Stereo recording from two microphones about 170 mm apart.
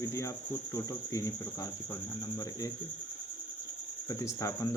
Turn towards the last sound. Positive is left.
turn(degrees=20)  # may be behind; listen again after turning